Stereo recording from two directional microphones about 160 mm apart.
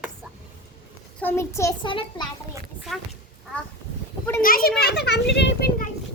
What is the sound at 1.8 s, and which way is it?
Speech, 30° left (ahead or behind).